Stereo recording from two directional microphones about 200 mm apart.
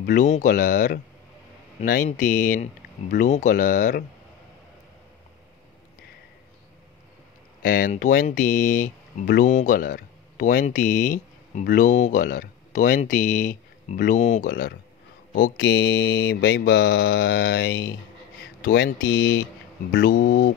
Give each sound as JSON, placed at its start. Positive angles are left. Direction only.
{"t": 0.0, "sound": "speech", "side_deg": 40}
{"t": 7.6, "sound": "speech", "side_deg": 45}
{"t": 15.6, "sound": "mantra", "side_deg": 65}
{"t": 18.6, "sound": "speech", "side_deg": 50}
{"t": 19.0, "sound": "speech", "side_deg": 75}
{"t": 20.1, "sound": "speech", "side_deg": 45}